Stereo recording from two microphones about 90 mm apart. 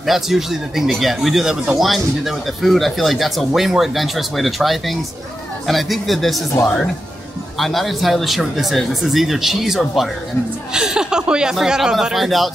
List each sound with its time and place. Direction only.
0.0 s speech: 5° right (ahead or behind)
6.5 s speech: 35° left (ahead or behind)
7.5 s speech: centre (ahead or behind)